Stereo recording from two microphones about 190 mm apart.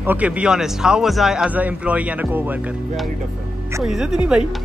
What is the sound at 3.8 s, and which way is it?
Speech, centre (ahead or behind).